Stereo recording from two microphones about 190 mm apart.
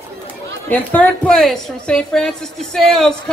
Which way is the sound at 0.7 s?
10° left (ahead or behind).